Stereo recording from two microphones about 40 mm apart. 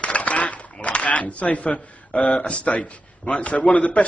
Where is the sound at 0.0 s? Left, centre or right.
Left.